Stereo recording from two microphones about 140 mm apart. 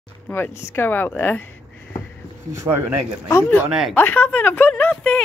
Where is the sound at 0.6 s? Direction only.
20° left (ahead or behind).